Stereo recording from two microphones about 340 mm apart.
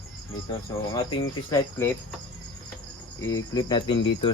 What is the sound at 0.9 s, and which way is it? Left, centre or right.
Speech, centre.